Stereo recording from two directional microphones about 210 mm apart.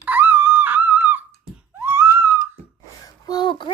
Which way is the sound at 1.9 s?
10° right (ahead or behind).